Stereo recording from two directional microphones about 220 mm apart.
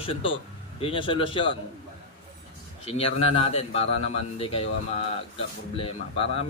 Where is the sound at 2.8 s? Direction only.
25° left (ahead or behind).